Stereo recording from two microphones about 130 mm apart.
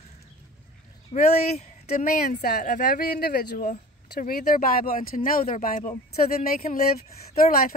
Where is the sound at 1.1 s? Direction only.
65° left (ahead or behind).